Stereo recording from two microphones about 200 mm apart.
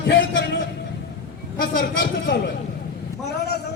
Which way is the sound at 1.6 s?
65° left (ahead or behind).